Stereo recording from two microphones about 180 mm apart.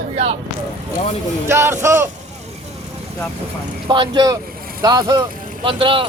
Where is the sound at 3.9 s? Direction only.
25° right (ahead or behind).